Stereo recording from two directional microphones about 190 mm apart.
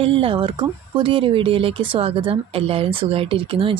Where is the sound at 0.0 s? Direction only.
30° right (ahead or behind).